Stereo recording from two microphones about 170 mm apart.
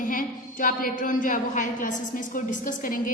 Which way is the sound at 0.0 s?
55° left (ahead or behind).